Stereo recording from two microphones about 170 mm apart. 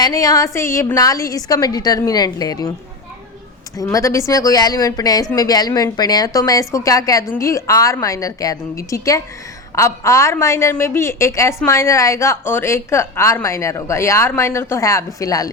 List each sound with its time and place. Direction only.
0.0 s a woman's voice: 20° left (ahead or behind)
3.9 s a woman's voice: 15° left (ahead or behind)